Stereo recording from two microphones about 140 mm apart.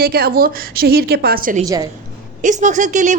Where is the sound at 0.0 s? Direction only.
90° right.